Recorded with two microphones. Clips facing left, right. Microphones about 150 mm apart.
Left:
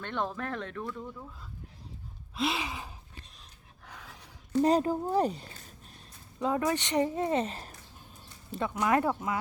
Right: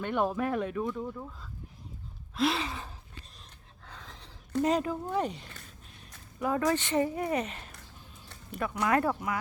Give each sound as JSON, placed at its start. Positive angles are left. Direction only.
{"t": 0.0, "sound": "speech", "side_deg": -10}
{"t": 2.3, "sound": "gasp", "side_deg": 0}
{"t": 2.6, "sound": "gasp", "side_deg": 10}
{"t": 4.6, "sound": "speech", "side_deg": 35}
{"t": 6.4, "sound": "speech", "side_deg": 20}